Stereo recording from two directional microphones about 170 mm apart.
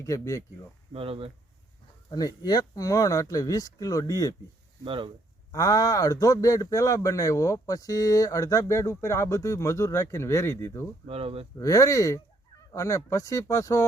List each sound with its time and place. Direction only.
0.0 s speech: 20° left (ahead or behind)
0.9 s speech: 35° right (ahead or behind)
2.0 s speech: 25° left (ahead or behind)
4.9 s speech: 30° right (ahead or behind)
5.5 s speech: 20° left (ahead or behind)
11.0 s speech: 35° right (ahead or behind)
11.5 s speech: 20° left (ahead or behind)